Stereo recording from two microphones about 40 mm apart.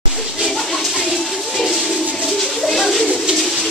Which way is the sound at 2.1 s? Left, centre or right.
Centre.